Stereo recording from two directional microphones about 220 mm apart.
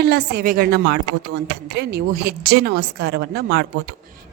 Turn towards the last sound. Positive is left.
turn(degrees=-50)  # may be behind; listen again after turning